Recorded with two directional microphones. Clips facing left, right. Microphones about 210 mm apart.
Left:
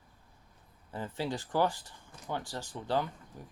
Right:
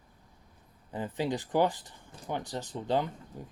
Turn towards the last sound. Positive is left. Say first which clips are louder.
# right 3 dB
turn(degrees=-20)  # may be behind; listen again after turning